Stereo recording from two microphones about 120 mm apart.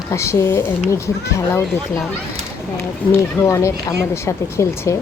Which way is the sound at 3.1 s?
25° left (ahead or behind).